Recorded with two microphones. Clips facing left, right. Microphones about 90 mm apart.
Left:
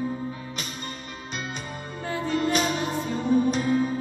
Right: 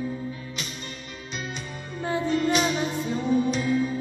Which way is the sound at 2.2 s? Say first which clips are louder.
Even; 45° left (ahead or behind).